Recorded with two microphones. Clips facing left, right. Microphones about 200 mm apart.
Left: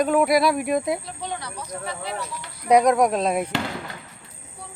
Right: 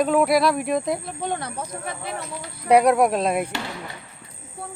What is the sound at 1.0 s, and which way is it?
Speech, 55° right (ahead or behind).